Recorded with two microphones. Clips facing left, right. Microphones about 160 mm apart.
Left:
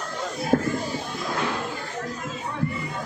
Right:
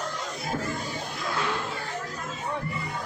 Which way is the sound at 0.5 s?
60° left (ahead or behind).